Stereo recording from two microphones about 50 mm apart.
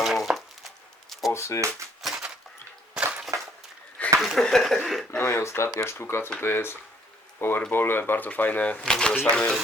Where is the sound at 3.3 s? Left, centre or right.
Right.